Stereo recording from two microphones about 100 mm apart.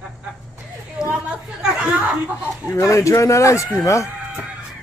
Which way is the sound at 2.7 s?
30° left (ahead or behind).